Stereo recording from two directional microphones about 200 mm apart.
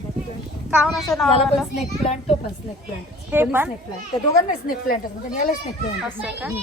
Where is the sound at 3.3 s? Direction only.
10° right (ahead or behind).